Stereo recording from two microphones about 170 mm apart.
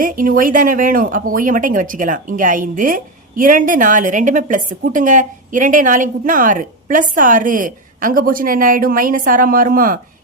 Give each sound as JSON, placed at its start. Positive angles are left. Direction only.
{"t": 0.0, "sound": "speech", "side_deg": -55}